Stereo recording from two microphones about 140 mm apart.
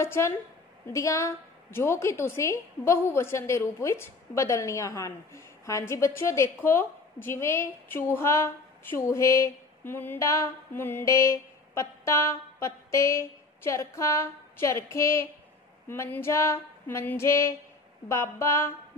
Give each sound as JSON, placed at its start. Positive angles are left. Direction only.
{"t": 0.0, "sound": "a woman's voice", "side_deg": 20}